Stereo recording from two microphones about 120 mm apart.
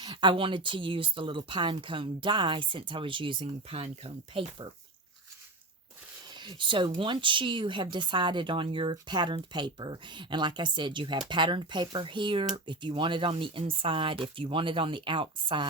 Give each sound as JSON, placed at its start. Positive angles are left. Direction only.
{"t": 0.0, "sound": "speech", "side_deg": -40}
{"t": 6.3, "sound": "speech", "side_deg": -40}